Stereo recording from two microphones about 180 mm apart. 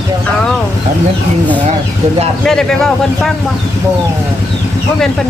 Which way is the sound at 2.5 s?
5° left (ahead or behind).